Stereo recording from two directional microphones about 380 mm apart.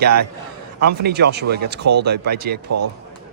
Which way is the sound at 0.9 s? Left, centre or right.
Right.